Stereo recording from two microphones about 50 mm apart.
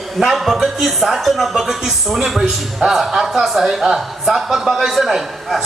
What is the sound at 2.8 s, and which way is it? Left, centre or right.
Speech, centre.